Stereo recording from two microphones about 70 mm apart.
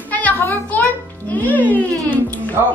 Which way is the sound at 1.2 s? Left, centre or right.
Left.